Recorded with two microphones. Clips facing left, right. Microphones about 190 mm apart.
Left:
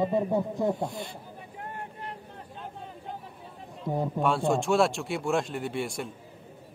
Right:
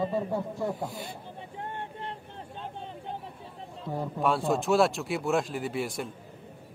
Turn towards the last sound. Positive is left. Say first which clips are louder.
# even
turn(degrees=0)  # may be behind; listen again after turning